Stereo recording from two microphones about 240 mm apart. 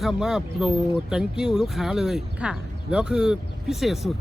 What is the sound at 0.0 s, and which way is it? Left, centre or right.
Speech, centre.